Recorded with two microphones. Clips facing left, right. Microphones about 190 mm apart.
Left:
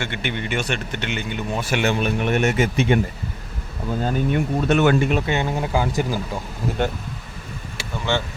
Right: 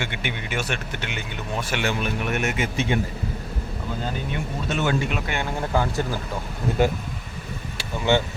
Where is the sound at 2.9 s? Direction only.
60° left (ahead or behind).